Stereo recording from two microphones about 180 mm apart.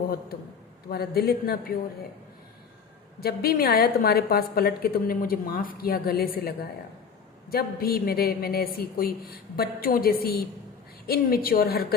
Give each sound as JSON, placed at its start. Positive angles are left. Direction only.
{"t": 0.9, "sound": "a woman's voice", "side_deg": 60}
{"t": 3.2, "sound": "a woman's voice", "side_deg": 60}